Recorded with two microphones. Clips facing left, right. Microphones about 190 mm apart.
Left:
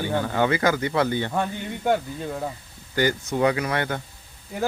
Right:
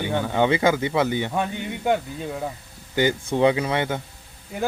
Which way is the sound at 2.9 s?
20° right (ahead or behind).